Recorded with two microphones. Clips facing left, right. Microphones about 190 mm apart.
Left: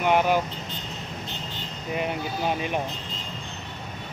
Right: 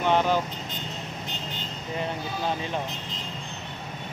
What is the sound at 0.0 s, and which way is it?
Speech, 10° left (ahead or behind).